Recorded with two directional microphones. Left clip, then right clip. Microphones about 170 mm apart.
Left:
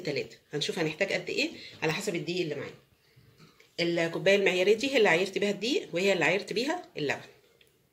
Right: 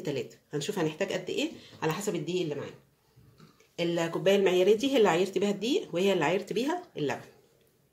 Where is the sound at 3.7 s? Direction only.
35° right (ahead or behind).